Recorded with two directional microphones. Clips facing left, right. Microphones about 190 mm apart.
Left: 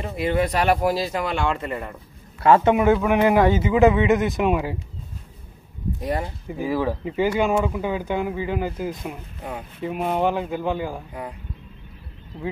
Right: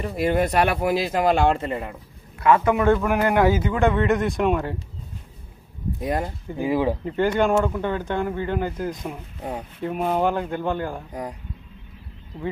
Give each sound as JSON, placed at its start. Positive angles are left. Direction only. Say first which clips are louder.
{"t": 0.1, "sound": "speech", "louder": "right 1 dB", "side_deg": -45}
{"t": 1.6, "sound": "speech", "louder": "right 1 dB", "side_deg": -25}
{"t": 2.4, "sound": "a man's voice", "louder": "left 2 dB", "side_deg": 25}
{"t": 2.8, "sound": "speech", "louder": "left 2 dB", "side_deg": 5}
{"t": 6.6, "sound": "speech", "louder": "right 2 dB", "side_deg": -20}
{"t": 7.1, "sound": "speech", "louder": "left 1 dB", "side_deg": 5}